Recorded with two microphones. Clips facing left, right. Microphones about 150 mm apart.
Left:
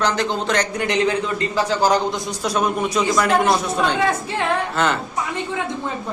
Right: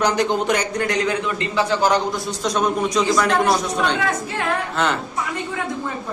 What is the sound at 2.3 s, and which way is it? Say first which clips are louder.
A man's voice: even; 10° left (ahead or behind).